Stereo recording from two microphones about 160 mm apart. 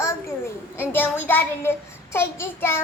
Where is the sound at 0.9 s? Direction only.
10° left (ahead or behind).